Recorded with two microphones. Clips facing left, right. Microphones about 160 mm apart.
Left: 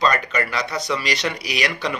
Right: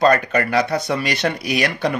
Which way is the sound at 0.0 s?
55° right (ahead or behind).